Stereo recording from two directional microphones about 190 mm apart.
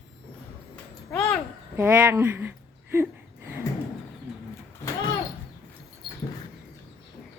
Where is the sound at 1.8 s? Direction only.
10° right (ahead or behind).